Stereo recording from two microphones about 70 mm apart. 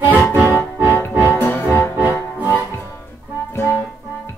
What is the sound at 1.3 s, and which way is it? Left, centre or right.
Music, left.